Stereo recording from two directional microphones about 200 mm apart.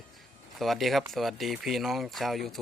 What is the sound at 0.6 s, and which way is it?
Speech, centre (ahead or behind).